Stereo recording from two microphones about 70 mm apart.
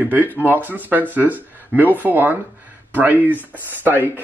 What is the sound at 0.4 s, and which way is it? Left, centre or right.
Speech, right.